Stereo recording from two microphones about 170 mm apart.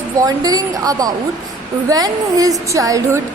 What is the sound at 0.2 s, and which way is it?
A woman's voice, 20° right (ahead or behind).